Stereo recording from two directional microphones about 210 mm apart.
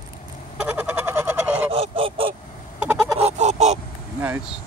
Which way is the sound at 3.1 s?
30° right (ahead or behind).